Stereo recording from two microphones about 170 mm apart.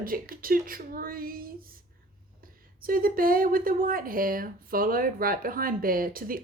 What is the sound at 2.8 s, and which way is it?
Speech, 55° right (ahead or behind).